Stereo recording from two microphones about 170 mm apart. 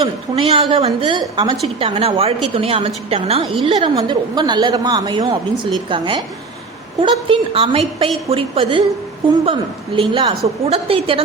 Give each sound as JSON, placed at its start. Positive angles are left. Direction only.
{"t": 0.0, "sound": "a woman's voice", "side_deg": -35}